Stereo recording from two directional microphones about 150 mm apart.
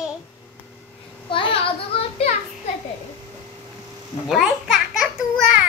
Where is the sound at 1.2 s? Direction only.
35° left (ahead or behind).